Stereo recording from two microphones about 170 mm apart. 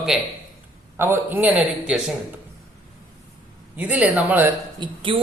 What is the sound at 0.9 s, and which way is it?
A man's voice, 15° right (ahead or behind).